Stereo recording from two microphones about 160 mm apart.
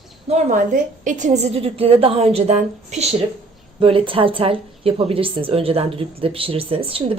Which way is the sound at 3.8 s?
35° right (ahead or behind).